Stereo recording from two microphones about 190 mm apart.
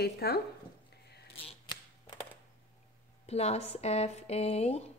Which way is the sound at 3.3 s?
35° left (ahead or behind).